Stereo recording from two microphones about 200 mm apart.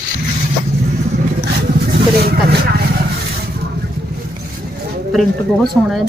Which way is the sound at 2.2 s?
50° right (ahead or behind).